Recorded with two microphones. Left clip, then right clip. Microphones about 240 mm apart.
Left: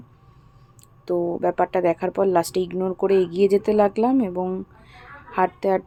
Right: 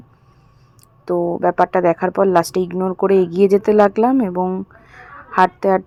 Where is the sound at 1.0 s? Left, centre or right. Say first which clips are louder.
Right 5 dB; centre.